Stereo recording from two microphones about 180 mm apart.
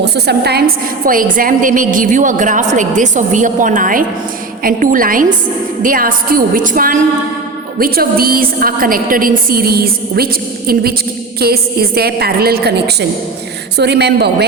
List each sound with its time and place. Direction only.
0.0 s a woman's voice: 65° right (ahead or behind)
1.0 s a woman's voice: 50° right (ahead or behind)
11.3 s a woman's voice: 60° right (ahead or behind)